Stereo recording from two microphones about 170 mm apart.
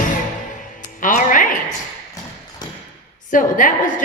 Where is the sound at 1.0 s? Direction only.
50° left (ahead or behind).